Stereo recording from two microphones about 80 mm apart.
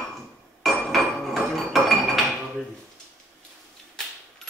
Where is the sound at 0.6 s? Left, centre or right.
Centre.